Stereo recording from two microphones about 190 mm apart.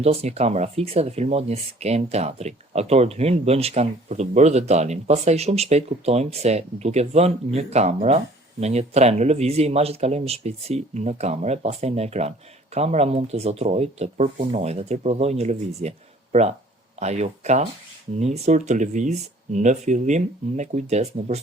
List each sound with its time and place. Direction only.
0.0 s speech: 35° right (ahead or behind)